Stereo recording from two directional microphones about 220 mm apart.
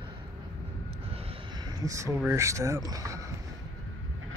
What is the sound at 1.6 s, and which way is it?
Speech, 15° right (ahead or behind).